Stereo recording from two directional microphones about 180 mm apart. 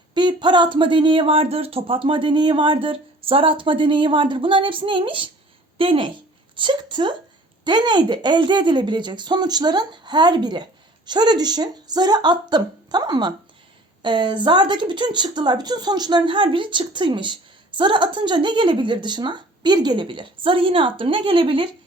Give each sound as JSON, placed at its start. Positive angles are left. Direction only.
{"t": 0.1, "sound": "a woman's voice", "side_deg": -25}